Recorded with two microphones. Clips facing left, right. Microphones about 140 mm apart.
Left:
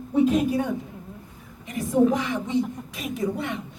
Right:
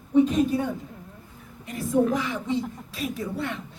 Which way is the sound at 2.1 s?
15° left (ahead or behind).